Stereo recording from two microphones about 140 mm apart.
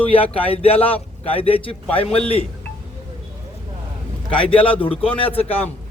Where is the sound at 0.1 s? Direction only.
40° left (ahead or behind).